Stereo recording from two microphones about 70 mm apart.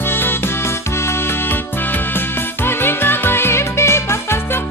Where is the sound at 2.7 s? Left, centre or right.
Left.